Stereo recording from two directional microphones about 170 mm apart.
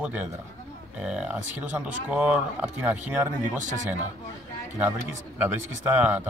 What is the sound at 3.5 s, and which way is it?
Speech, 45° right (ahead or behind).